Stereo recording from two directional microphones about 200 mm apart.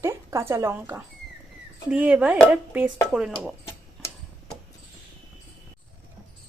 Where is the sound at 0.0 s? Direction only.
15° right (ahead or behind).